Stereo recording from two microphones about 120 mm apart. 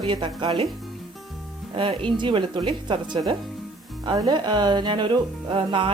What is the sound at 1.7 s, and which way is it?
Speech, 45° right (ahead or behind).